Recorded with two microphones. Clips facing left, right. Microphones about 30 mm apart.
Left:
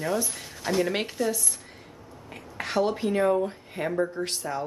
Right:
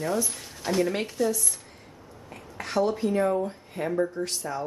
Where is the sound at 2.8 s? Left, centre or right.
Left.